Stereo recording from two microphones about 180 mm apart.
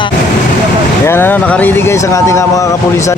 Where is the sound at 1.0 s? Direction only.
10° left (ahead or behind).